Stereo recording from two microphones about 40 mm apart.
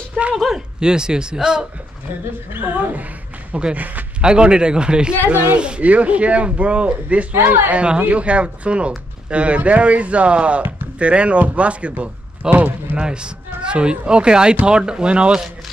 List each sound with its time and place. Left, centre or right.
0.2 s speech: right
2.5 s speech: right
4.2 s speech: right
5.3 s speech: right
5.8 s speech: right
12.9 s speech: right